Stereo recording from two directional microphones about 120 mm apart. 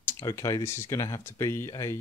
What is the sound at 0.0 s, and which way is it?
Speech, 25° left (ahead or behind).